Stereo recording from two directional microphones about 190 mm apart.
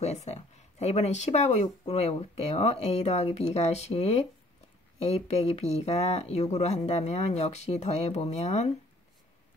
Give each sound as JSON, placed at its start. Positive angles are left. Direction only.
{"t": 0.0, "sound": "speech", "side_deg": 35}